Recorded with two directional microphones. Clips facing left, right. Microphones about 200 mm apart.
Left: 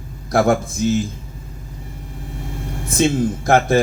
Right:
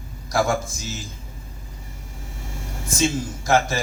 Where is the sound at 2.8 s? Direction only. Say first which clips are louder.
Left 6 dB; 60° left (ahead or behind).